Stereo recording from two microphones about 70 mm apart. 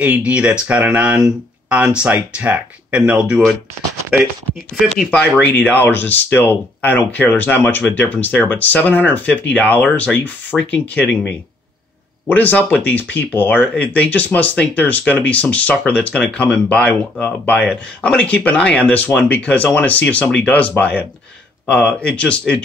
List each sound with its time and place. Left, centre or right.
0.0 s speech: centre
4.8 s speech: centre
5.4 s speech: left
12.3 s speech: left